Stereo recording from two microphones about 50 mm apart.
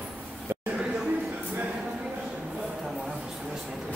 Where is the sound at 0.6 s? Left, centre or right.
Right.